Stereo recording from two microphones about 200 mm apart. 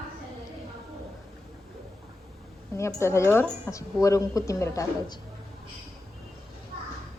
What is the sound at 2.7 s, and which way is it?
A woman's voice, 15° left (ahead or behind).